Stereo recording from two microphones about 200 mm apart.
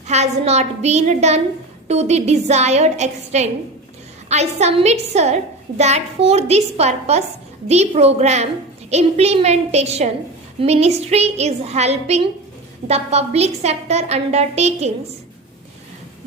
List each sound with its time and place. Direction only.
0.1 s a woman's voice: 35° right (ahead or behind)